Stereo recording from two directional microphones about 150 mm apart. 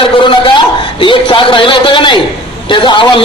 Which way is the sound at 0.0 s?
35° left (ahead or behind).